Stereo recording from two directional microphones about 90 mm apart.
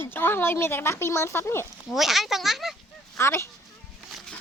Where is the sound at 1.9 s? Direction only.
Centre (ahead or behind).